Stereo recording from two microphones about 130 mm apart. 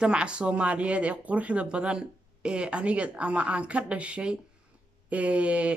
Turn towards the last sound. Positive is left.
turn(degrees=-10)  # may be behind; listen again after turning